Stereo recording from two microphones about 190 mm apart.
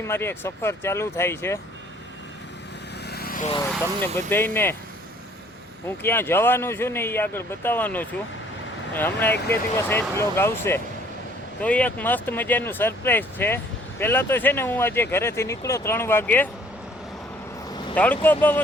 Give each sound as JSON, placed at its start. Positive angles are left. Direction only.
{"t": 0.1, "sound": "speech", "side_deg": 10}
{"t": 3.1, "sound": "vehicle", "side_deg": 50}
{"t": 4.0, "sound": "speech", "side_deg": 10}
{"t": 6.0, "sound": "speech", "side_deg": 10}
{"t": 17.9, "sound": "speech", "side_deg": 10}